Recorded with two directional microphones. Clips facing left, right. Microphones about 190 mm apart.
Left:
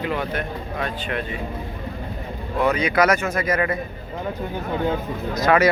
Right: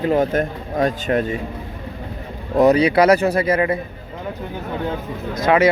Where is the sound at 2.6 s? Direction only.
35° right (ahead or behind).